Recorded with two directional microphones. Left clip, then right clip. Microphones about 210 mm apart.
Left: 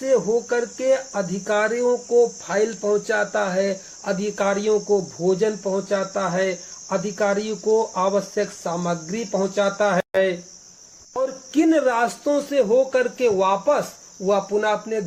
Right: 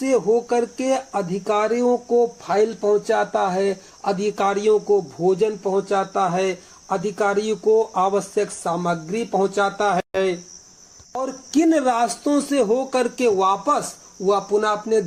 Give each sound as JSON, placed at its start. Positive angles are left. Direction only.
{"t": 0.0, "sound": "speech", "side_deg": -35}
{"t": 5.2, "sound": "cricket", "side_deg": -25}
{"t": 6.9, "sound": "speech", "side_deg": -30}
{"t": 11.5, "sound": "speech", "side_deg": -35}